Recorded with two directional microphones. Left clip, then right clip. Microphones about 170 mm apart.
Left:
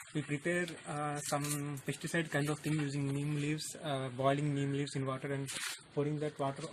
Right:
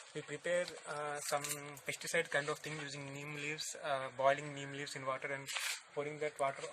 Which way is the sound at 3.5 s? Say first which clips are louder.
Even; 5° left (ahead or behind).